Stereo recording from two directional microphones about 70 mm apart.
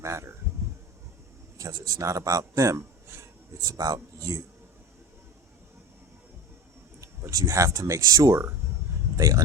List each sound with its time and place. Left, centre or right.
0.0 s a man's voice: right
1.5 s a man's voice: right
3.6 s a man's voice: right
7.0 s a man's voice: right
8.6 s a sound: right
9.1 s speech: right